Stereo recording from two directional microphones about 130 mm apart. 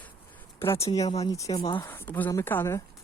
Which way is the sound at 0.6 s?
20° left (ahead or behind).